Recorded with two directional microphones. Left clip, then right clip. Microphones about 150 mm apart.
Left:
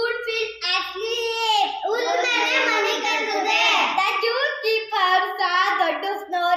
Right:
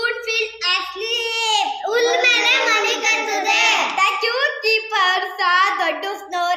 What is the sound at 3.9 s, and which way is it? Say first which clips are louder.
Child singing: right 3 dB; 10° right (ahead or behind).